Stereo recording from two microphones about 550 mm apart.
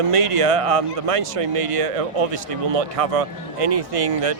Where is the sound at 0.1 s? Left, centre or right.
Right.